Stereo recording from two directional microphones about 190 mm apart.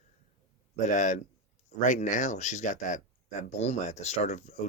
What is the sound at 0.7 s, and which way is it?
Speech, 40° left (ahead or behind).